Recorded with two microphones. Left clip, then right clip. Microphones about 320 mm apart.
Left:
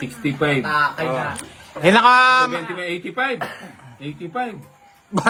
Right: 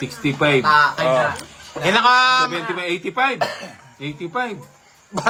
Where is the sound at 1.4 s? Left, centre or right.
Left.